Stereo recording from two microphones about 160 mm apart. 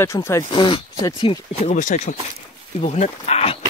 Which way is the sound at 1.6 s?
50° left (ahead or behind).